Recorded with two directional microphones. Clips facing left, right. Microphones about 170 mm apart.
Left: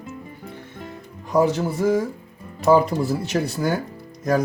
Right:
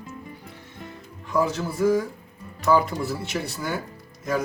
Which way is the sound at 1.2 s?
35° left (ahead or behind).